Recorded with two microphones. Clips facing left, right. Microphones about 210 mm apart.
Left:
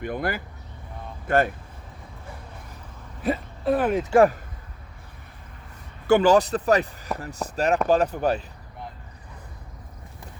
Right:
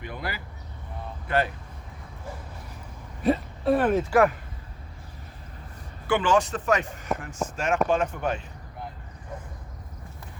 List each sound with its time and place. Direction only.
0.0 s speech: 50° left (ahead or behind)
3.2 s speech: centre (ahead or behind)
3.9 s speech: 20° left (ahead or behind)
6.1 s speech: 40° left (ahead or behind)